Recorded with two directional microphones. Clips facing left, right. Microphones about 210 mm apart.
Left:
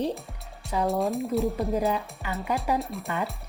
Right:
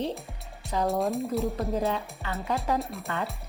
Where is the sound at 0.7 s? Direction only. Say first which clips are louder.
Left 1 dB; centre (ahead or behind).